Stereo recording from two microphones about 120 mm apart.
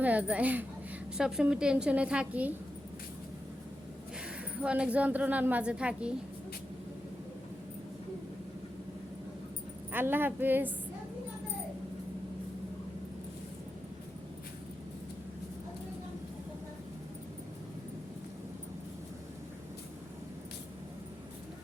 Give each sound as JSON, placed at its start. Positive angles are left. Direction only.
{"t": 0.0, "sound": "a woman's voice", "side_deg": -10}
{"t": 4.6, "sound": "a woman's voice", "side_deg": -10}
{"t": 9.9, "sound": "a woman's voice", "side_deg": -15}